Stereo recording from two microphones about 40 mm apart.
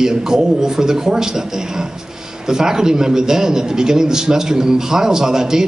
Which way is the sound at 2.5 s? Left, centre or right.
Centre.